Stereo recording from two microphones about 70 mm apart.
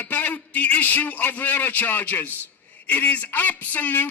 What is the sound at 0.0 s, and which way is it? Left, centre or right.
A man's voice, left.